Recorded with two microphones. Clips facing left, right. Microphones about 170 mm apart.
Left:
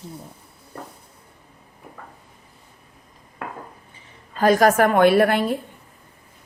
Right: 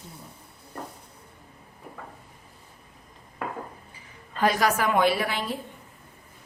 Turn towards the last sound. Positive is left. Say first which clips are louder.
# left 9 dB
turn(degrees=55)  # may be behind; listen again after turning